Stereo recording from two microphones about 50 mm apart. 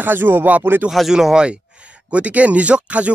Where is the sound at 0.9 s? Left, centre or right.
Centre.